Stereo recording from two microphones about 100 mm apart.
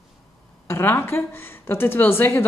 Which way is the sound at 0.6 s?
20° left (ahead or behind).